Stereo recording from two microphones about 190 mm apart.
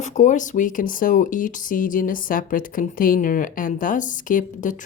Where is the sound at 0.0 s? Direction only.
40° left (ahead or behind).